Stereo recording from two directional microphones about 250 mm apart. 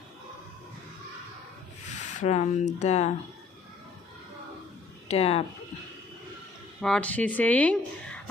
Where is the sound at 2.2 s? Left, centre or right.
Left.